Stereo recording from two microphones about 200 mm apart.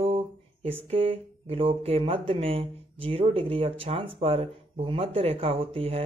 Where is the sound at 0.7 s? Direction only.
30° right (ahead or behind).